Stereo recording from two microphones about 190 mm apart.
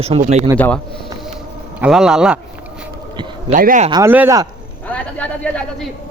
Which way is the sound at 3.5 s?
45° right (ahead or behind).